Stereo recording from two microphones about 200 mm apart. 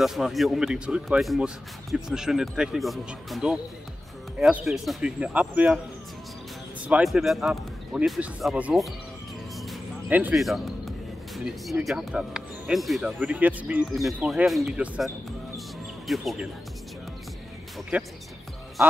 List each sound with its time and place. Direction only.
0.0 s speech: centre (ahead or behind)
6.9 s speech: centre (ahead or behind)
17.9 s speech: 5° right (ahead or behind)